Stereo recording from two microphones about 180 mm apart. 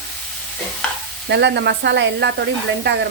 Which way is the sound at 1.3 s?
75° right (ahead or behind).